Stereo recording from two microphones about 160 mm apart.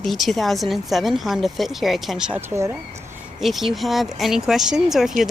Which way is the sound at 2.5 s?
15° right (ahead or behind).